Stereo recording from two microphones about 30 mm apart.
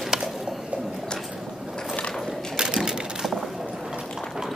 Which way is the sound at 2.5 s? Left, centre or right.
Right.